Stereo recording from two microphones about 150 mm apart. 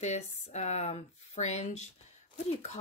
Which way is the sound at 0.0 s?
50° left (ahead or behind).